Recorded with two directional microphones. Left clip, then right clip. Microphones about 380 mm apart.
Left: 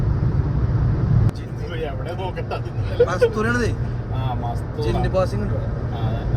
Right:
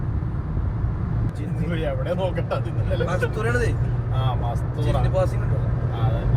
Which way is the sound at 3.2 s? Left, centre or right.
Left.